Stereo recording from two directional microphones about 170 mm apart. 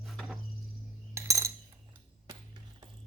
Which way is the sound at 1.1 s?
20° right (ahead or behind).